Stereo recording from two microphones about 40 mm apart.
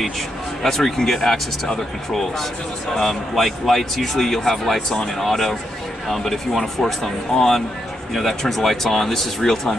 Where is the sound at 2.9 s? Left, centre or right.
Centre.